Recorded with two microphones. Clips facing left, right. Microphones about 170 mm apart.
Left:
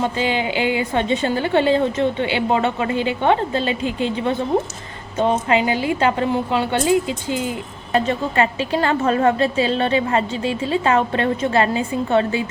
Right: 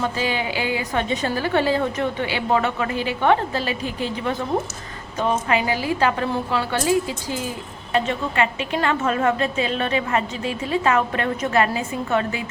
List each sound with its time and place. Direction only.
0.0 s a woman's voice: 25° left (ahead or behind)
7.9 s a woman's voice: 35° left (ahead or behind)